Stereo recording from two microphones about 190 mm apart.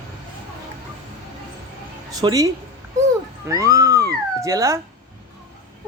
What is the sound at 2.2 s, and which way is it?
Speech, 20° right (ahead or behind).